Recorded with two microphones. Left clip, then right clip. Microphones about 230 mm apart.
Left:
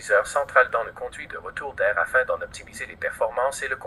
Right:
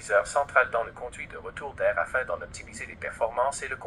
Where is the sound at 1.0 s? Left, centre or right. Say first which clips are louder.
Left 5 dB; left.